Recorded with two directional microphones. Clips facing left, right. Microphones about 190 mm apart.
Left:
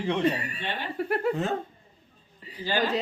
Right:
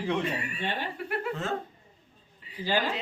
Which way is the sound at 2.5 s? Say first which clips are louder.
Even; 40° left (ahead or behind).